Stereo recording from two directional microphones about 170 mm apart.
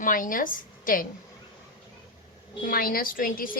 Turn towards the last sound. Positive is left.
turn(degrees=55)  # may be behind; listen again after turning